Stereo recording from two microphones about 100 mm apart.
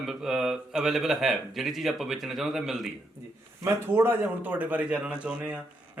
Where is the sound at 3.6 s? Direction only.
25° right (ahead or behind).